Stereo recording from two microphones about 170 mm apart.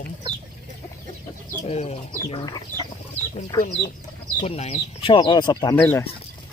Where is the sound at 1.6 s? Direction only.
40° left (ahead or behind).